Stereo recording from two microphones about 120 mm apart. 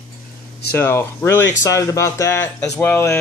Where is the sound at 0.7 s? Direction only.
20° left (ahead or behind).